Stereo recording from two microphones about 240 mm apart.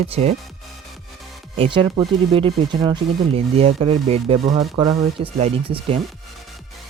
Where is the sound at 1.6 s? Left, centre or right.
Right.